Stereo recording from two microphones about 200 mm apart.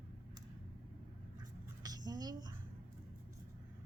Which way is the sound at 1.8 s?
20° right (ahead or behind).